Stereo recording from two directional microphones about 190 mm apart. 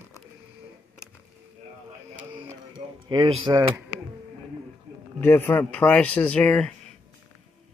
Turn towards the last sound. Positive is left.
turn(degrees=5)  # may be behind; listen again after turning